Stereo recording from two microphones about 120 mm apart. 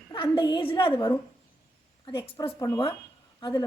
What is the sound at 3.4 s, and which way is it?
Speech, 35° left (ahead or behind).